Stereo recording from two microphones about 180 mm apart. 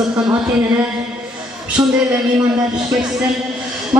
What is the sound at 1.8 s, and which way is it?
Speech, 20° right (ahead or behind).